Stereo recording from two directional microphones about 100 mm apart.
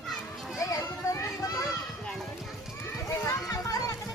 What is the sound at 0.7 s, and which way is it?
Children playing, 35° left (ahead or behind).